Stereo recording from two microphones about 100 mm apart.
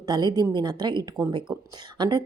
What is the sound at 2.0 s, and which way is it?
Speech, 50° right (ahead or behind).